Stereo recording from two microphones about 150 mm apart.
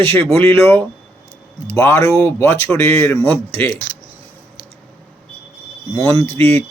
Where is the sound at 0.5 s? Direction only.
15° left (ahead or behind).